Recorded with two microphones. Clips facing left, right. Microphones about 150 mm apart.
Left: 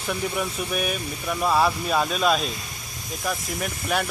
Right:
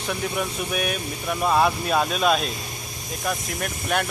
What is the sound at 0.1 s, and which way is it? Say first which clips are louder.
Speech: even; centre (ahead or behind).